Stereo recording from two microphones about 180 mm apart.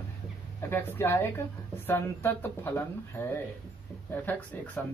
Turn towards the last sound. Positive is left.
turn(degrees=10)  # may be behind; listen again after turning